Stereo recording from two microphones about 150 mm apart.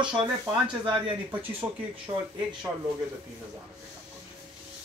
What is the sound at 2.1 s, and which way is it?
Speech, 25° right (ahead or behind).